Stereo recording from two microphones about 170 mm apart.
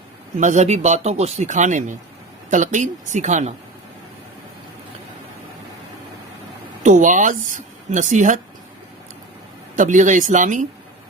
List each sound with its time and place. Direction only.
0.3 s speech: 45° right (ahead or behind)
6.8 s speech: 45° right (ahead or behind)
9.7 s speech: 50° right (ahead or behind)